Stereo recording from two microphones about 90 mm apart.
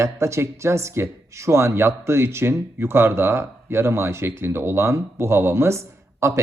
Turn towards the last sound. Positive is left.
turn(degrees=-30)  # may be behind; listen again after turning